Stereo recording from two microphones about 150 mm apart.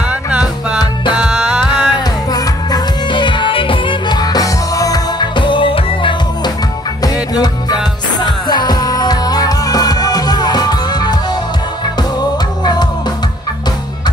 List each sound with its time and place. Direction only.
1.1 s music: 5° right (ahead or behind)
1.7 s music: 30° left (ahead or behind)